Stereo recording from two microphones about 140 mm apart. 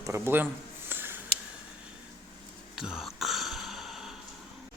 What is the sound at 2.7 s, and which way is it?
Throat clearing, 5° right (ahead or behind).